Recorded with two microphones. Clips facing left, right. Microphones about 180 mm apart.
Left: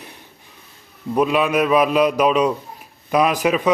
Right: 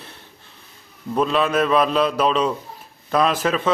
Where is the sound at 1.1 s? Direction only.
10° left (ahead or behind).